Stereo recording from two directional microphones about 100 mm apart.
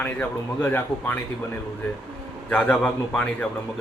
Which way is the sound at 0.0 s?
20° left (ahead or behind).